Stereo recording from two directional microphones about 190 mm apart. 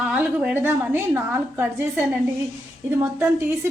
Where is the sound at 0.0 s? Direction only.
10° right (ahead or behind).